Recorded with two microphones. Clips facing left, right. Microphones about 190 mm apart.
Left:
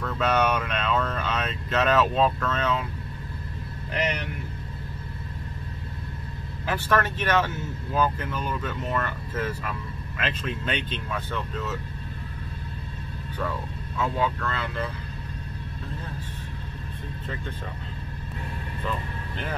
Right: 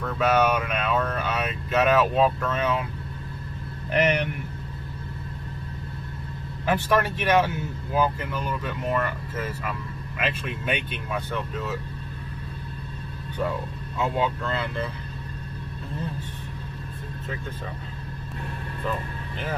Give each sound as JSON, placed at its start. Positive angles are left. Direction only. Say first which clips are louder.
{"t": 0.0, "sound": "speech", "louder": "right 2 dB", "side_deg": -10}
{"t": 6.7, "sound": "speech", "louder": "right 2 dB", "side_deg": -10}
{"t": 13.9, "sound": "speech", "louder": "right 1 dB", "side_deg": -20}